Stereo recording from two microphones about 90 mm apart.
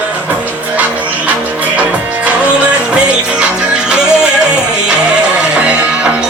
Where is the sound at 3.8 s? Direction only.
10° right (ahead or behind).